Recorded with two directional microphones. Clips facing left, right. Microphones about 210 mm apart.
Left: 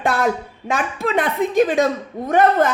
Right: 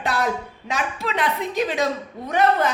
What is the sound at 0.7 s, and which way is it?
Speech, 50° left (ahead or behind).